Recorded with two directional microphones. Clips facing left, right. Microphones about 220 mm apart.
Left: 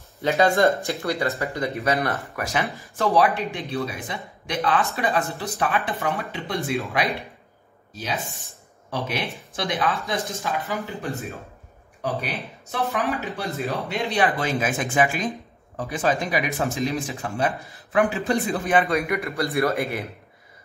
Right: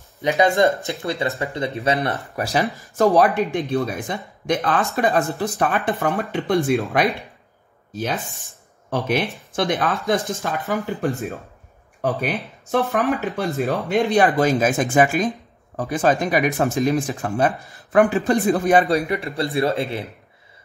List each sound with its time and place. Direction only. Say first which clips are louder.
0.2 s speech: right 2 dB; 15° right (ahead or behind); by 10.8 s 50° right (ahead or behind)
12.0 s speech: right 5 dB; 50° right (ahead or behind); by 20.1 s 25° right (ahead or behind)